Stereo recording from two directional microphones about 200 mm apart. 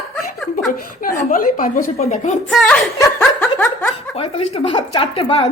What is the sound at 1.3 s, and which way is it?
A woman's voice, 45° left (ahead or behind).